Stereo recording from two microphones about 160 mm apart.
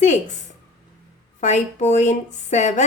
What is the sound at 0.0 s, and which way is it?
Speech, 50° left (ahead or behind).